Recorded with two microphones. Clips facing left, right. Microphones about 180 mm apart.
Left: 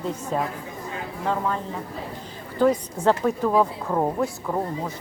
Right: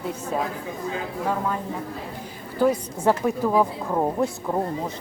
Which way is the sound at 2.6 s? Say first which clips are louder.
Left 1 dB; 10° right (ahead or behind).